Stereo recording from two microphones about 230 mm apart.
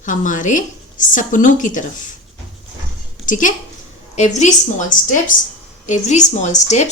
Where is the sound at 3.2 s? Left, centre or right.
Left.